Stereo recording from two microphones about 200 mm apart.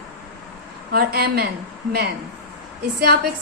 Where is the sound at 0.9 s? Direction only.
50° right (ahead or behind).